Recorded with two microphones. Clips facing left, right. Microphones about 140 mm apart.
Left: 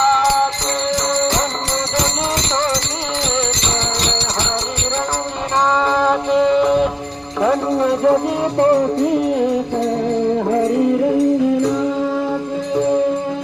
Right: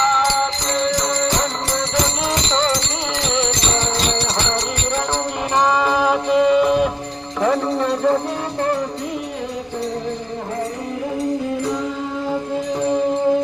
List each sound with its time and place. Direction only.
2.5 s music: 15° left (ahead or behind)
5.9 s music: 5° right (ahead or behind)
7.4 s a sound: 5° left (ahead or behind)